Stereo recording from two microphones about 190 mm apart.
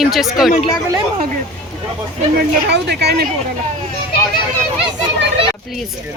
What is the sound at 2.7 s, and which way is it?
Speech, 60° right (ahead or behind).